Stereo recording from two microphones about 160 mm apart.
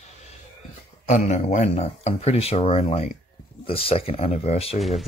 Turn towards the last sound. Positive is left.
turn(degrees=0)  # may be behind; listen again after turning